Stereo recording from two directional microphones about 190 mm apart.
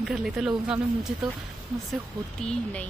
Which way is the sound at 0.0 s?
Centre (ahead or behind).